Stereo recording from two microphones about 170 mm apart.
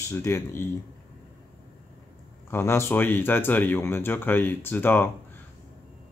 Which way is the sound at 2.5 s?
15° left (ahead or behind).